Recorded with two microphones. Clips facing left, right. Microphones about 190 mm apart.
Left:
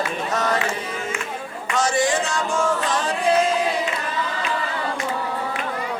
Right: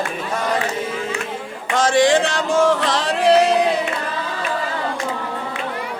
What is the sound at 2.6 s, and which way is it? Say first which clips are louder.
Music: right 5 dB; 85° right.